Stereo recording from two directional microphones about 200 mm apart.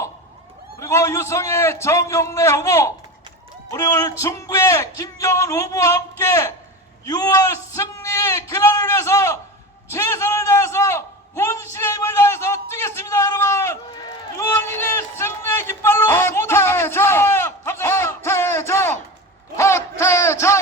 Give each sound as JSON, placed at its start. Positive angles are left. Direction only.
{"t": 0.8, "sound": "a man's voice", "side_deg": 15}
{"t": 15.2, "sound": "a sound", "side_deg": 10}
{"t": 19.5, "sound": "a man's voice", "side_deg": 15}